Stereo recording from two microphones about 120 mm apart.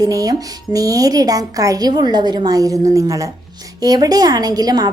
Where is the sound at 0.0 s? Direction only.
30° right (ahead or behind).